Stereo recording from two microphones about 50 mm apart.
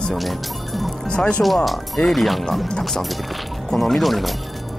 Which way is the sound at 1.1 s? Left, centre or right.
Centre.